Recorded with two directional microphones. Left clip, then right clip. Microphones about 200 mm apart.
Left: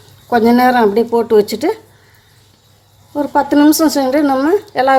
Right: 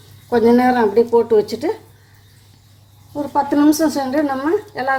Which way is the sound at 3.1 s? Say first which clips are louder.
Left 5 dB; 25° left (ahead or behind).